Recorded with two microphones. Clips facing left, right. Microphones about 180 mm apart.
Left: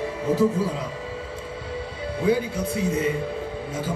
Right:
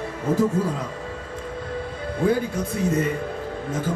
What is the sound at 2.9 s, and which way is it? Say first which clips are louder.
Music: even; 10° left (ahead or behind).